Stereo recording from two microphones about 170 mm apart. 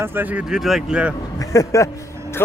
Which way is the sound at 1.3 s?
20° left (ahead or behind).